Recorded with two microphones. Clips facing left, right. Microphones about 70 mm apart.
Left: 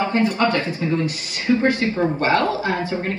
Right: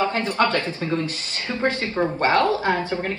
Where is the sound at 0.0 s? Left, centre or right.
Left.